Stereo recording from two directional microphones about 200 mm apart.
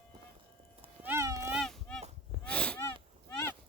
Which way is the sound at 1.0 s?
10° right (ahead or behind).